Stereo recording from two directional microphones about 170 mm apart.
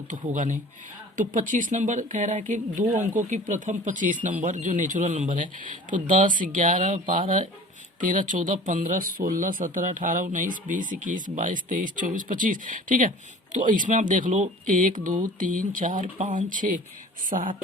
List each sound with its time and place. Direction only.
0.3 s speech: 50° right (ahead or behind)